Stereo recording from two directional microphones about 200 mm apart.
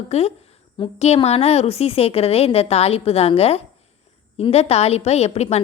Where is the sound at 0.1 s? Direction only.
30° left (ahead or behind).